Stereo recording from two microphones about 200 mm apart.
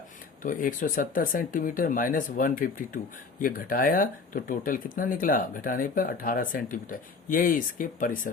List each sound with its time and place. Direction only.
0.4 s speech: 45° left (ahead or behind)